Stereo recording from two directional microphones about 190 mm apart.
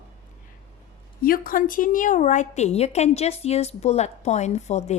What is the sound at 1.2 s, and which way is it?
A woman's voice, 50° left (ahead or behind).